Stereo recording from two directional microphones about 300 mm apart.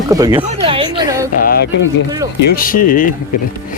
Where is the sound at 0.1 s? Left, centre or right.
Centre.